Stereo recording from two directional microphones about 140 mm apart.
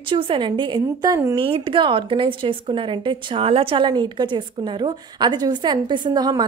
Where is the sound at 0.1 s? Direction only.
40° right (ahead or behind).